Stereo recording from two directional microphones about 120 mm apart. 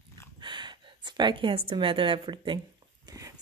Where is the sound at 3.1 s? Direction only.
30° right (ahead or behind).